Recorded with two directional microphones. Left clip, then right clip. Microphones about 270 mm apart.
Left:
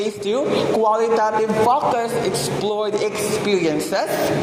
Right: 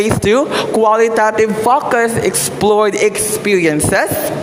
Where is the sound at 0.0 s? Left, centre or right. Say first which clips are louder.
Right 8 dB; right.